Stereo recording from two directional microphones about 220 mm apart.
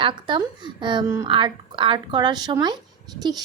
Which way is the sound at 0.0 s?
20° right (ahead or behind).